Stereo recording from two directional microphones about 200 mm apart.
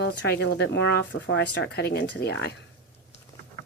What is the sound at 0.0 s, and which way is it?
Speech, 55° left (ahead or behind).